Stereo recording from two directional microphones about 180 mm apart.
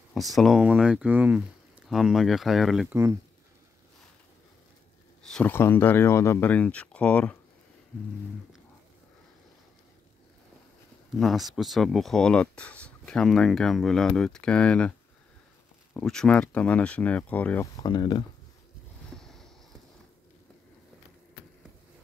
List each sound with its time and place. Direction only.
0.3 s speech: centre (ahead or behind)
5.2 s speech: 5° left (ahead or behind)
11.1 s speech: centre (ahead or behind)
17.7 s speech: 25° left (ahead or behind)
19.1 s a sound: centre (ahead or behind)